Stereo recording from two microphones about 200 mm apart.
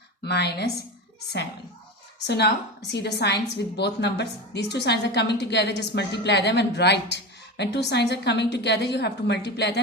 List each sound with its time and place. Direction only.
0.3 s a woman's voice: 55° left (ahead or behind)
2.2 s a woman's voice: 55° left (ahead or behind)